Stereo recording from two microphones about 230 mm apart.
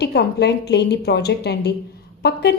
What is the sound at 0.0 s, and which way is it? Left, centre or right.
A woman's voice, left.